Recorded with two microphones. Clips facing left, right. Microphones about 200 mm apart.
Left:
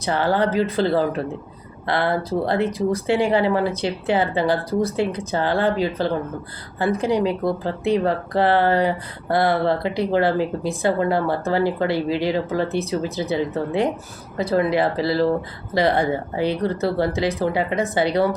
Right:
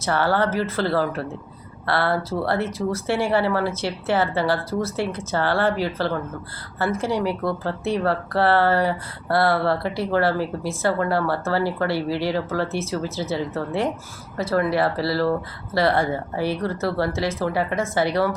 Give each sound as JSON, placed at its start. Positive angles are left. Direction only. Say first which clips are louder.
{"t": 0.0, "sound": "speech", "louder": "left 1 dB", "side_deg": 15}